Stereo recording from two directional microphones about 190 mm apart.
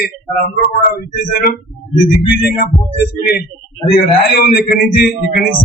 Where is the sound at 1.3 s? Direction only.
50° left (ahead or behind).